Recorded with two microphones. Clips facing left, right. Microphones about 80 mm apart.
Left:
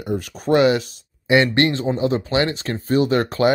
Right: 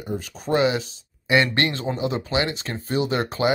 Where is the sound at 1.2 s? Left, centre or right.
Left.